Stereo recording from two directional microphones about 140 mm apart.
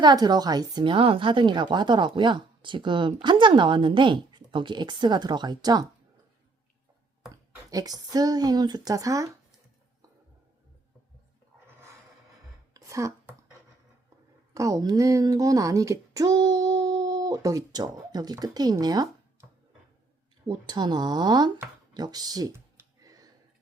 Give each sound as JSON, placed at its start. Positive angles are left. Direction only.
{"t": 0.0, "sound": "speech", "side_deg": -30}
{"t": 7.7, "sound": "speech", "side_deg": -25}
{"t": 12.7, "sound": "a sound", "side_deg": -25}
{"t": 14.5, "sound": "speech", "side_deg": -25}
{"t": 20.5, "sound": "speech", "side_deg": -30}
{"t": 21.9, "sound": "computer keyboard", "side_deg": -30}